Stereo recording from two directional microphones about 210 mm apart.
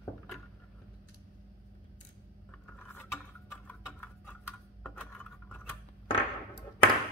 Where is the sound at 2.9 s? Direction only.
10° left (ahead or behind).